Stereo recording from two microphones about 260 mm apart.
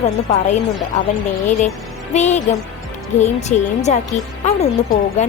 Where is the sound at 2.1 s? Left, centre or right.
Left.